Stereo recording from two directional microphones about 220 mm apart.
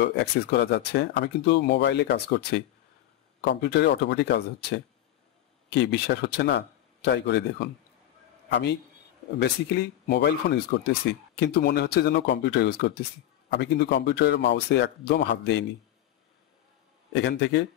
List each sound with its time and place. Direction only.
0.0 s speech: 50° left (ahead or behind)
8.5 s a man's voice: 50° left (ahead or behind)
17.1 s speech: 50° left (ahead or behind)